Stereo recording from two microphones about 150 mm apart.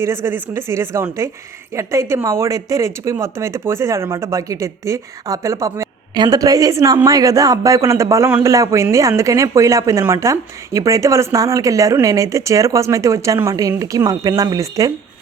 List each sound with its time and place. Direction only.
0.0 s speech: 15° right (ahead or behind)